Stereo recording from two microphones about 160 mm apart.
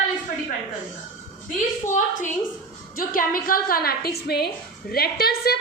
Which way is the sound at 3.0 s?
60° left (ahead or behind).